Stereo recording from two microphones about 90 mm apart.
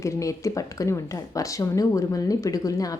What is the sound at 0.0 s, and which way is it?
Speech, 35° left (ahead or behind).